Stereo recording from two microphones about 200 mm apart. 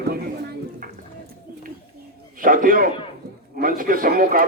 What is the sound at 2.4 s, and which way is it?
A man's voice, 45° right (ahead or behind).